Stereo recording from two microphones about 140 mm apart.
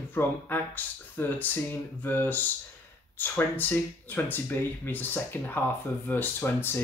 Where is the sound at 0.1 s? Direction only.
15° left (ahead or behind).